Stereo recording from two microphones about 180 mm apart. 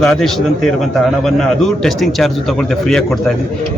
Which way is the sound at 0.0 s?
5° left (ahead or behind).